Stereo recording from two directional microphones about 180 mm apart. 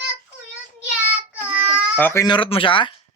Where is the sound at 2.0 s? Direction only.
15° left (ahead or behind).